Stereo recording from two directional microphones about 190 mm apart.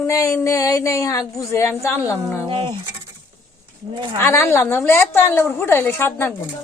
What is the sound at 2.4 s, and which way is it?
Speech, 25° right (ahead or behind).